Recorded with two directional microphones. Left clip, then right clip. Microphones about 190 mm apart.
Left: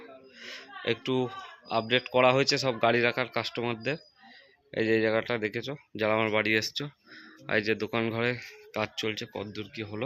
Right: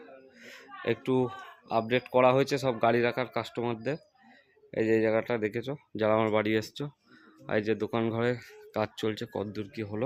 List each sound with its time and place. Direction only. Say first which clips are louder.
0.3 s speech: left 4 dB; 15° right (ahead or behind)